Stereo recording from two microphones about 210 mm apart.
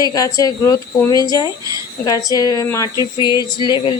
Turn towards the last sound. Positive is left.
turn(degrees=20)  # may be behind; listen again after turning